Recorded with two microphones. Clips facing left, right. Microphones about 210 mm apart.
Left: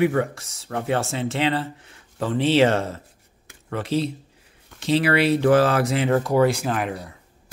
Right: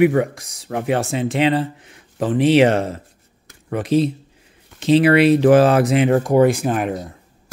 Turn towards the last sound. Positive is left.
turn(degrees=-20)  # may be behind; listen again after turning